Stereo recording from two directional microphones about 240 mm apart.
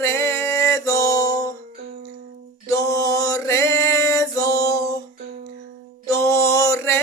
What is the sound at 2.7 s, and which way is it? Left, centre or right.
Mantra, centre.